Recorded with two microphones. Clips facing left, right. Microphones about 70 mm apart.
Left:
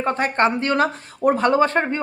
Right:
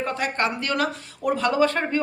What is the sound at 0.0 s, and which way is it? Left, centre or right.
A woman's voice, left.